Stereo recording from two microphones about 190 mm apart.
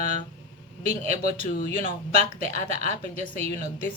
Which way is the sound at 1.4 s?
35° right (ahead or behind).